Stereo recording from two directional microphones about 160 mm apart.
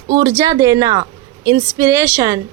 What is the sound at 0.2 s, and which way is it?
A woman's voice, 20° right (ahead or behind).